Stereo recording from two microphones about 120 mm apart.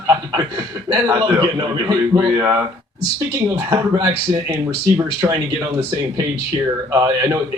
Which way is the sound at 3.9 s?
35° right (ahead or behind).